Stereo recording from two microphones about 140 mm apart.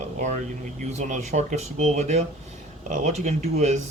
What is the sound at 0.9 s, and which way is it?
Speech, 55° right (ahead or behind).